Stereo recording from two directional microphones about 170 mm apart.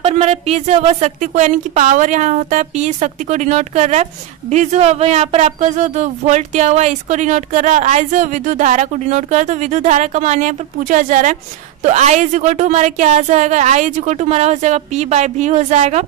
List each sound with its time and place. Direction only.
0.0 s a woman's voice: 35° right (ahead or behind)